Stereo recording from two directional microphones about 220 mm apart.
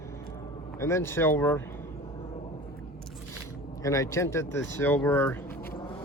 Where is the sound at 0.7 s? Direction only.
10° left (ahead or behind).